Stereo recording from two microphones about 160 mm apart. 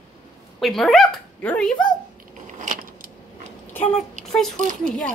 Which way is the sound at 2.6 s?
60° right (ahead or behind).